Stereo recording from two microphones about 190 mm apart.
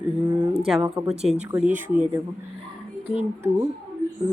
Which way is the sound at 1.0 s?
10° right (ahead or behind).